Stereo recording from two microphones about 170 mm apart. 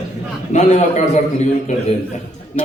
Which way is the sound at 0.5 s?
45° left (ahead or behind).